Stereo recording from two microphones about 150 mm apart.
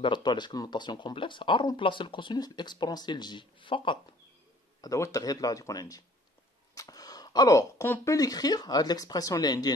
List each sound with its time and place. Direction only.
0.0 s speech: 30° left (ahead or behind)
4.8 s speech: 20° left (ahead or behind)